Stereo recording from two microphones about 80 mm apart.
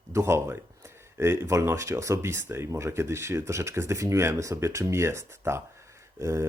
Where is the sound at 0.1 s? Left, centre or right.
Right.